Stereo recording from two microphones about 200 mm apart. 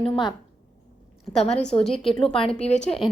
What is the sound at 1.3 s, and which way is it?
Speech, 5° left (ahead or behind).